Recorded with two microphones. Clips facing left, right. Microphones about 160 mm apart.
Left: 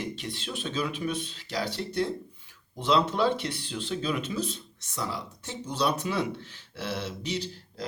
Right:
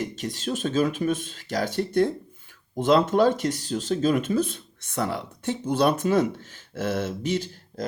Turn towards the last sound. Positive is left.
turn(degrees=-50)  # may be behind; listen again after turning